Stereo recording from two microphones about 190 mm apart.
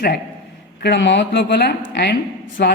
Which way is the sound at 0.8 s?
60° left (ahead or behind).